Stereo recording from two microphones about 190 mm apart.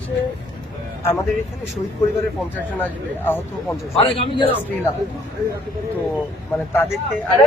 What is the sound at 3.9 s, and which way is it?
Speech, 25° left (ahead or behind).